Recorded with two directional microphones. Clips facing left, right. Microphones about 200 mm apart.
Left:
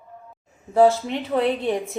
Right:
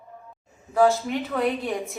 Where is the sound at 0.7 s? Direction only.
25° left (ahead or behind).